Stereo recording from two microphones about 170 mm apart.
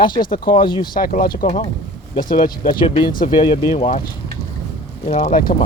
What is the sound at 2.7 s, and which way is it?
Speech, 30° left (ahead or behind).